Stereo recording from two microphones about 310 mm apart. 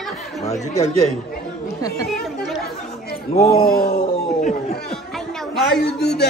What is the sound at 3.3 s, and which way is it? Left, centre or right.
A man's voice, left.